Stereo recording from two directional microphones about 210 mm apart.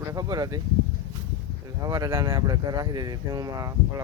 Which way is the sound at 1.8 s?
20° right (ahead or behind).